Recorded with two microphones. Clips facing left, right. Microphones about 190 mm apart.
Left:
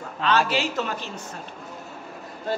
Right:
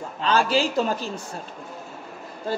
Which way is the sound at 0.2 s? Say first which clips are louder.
Right 2 dB; 30° right (ahead or behind).